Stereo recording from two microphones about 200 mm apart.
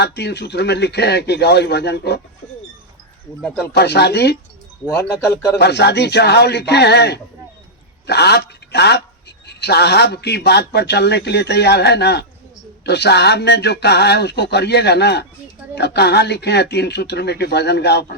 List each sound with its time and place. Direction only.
0.0 s a man's voice: 55° left (ahead or behind)
3.8 s a man's voice: 55° left (ahead or behind)
4.9 s speech: 10° left (ahead or behind)
5.5 s a man's voice: 55° left (ahead or behind)